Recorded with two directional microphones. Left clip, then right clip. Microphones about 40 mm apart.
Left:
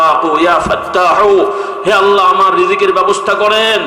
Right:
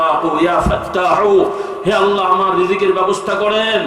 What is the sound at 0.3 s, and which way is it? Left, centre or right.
A man's voice, left.